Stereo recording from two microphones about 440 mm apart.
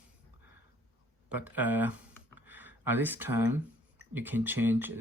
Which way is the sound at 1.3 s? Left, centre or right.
Centre.